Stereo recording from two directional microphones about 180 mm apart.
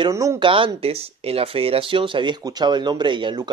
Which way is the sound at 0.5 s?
30° right (ahead or behind).